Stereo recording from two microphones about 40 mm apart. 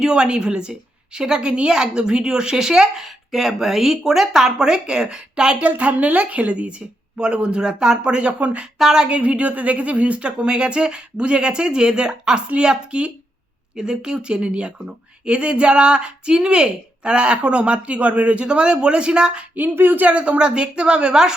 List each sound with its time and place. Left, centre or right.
0.0 s a woman's voice: right
5.6 s a woman's voice: right
8.8 s a woman's voice: centre
9.0 s a woman's voice: right
19.7 s speech: right
20.1 s speech: right